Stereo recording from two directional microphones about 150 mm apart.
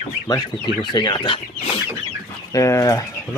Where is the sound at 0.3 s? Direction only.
30° left (ahead or behind).